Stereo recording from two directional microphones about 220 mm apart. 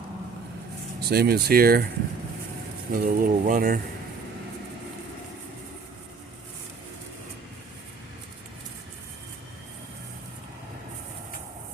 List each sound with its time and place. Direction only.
0.9 s speech: 45° right (ahead or behind)
2.9 s speech: 40° right (ahead or behind)